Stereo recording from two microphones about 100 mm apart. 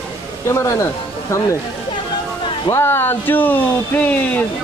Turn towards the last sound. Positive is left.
turn(degrees=15)  # may be behind; listen again after turning